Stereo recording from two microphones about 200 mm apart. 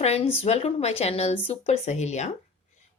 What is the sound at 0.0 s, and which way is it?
Speech, 30° left (ahead or behind).